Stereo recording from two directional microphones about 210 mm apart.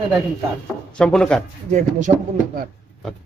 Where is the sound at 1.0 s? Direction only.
5° left (ahead or behind).